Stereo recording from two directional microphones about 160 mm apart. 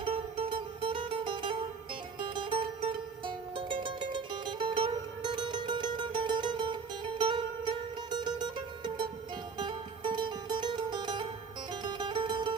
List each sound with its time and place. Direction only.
0.0 s music: 35° right (ahead or behind)